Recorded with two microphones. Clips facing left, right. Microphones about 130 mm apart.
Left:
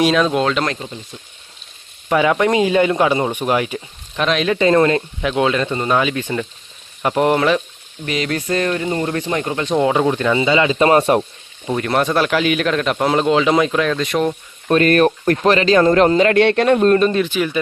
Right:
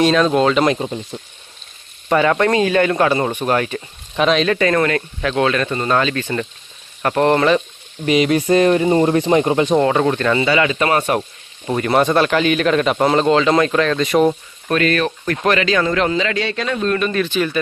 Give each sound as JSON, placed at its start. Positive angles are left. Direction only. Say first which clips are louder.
{"t": 0.0, "sound": "a man's voice", "louder": "right 2 dB", "side_deg": 5}
{"t": 2.0, "sound": "a man's voice", "louder": "even", "side_deg": 5}
{"t": 4.5, "sound": "speech", "louder": "left 3 dB", "side_deg": 25}
{"t": 8.0, "sound": "speech", "louder": "right 6 dB", "side_deg": -15}
{"t": 9.7, "sound": "speech", "louder": "left 4 dB", "side_deg": 5}
{"t": 10.5, "sound": "speech", "louder": "left 3 dB", "side_deg": 25}
{"t": 11.6, "sound": "a man's voice", "louder": "right 2 dB", "side_deg": -5}
{"t": 14.8, "sound": "speech", "louder": "left 5 dB", "side_deg": 45}
{"t": 15.4, "sound": "speech", "louder": "left 4 dB", "side_deg": 35}
{"t": 17.1, "sound": "speech", "louder": "left 2 dB", "side_deg": 20}
{"t": 17.3, "sound": "speech", "louder": "even", "side_deg": 10}